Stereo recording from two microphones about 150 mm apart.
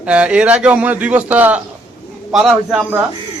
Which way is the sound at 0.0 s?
10° right (ahead or behind).